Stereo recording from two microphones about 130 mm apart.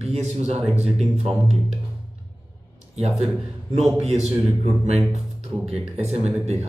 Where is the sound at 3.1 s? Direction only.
Centre (ahead or behind).